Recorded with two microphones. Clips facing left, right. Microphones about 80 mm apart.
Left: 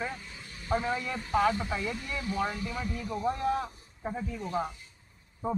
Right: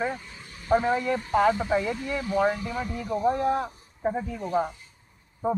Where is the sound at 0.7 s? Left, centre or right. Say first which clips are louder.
Right 7 dB; right.